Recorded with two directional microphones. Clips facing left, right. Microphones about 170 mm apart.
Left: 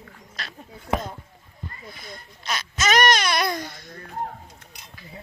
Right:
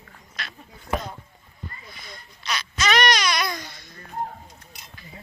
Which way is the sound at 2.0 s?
50° left (ahead or behind).